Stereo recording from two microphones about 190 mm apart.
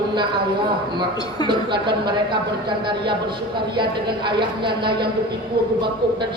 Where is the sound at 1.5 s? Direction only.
25° right (ahead or behind).